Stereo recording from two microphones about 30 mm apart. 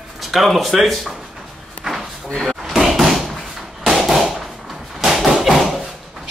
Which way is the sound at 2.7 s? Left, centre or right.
Centre.